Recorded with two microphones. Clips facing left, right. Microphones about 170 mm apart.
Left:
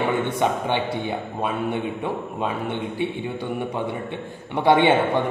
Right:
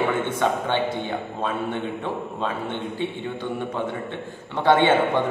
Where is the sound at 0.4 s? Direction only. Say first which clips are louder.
Even; 15° left (ahead or behind).